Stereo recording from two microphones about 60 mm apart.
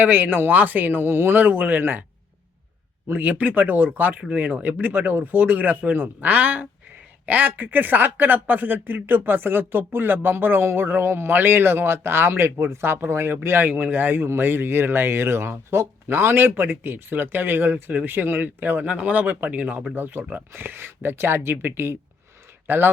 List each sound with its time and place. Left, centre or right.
0.0 s speech: right
3.2 s speech: right
18.9 s speech: right
19.9 s speech: right